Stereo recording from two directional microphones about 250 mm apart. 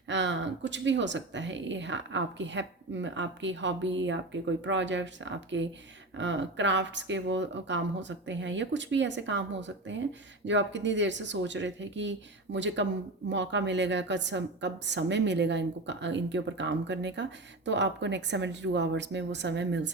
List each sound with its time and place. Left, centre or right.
0.1 s speech: right